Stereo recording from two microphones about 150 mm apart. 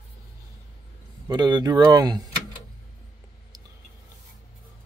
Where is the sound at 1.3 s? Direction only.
30° right (ahead or behind).